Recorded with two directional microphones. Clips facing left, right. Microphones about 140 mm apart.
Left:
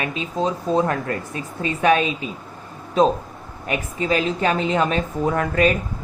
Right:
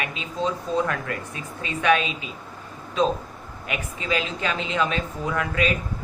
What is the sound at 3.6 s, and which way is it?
A woman's voice, 40° left (ahead or behind).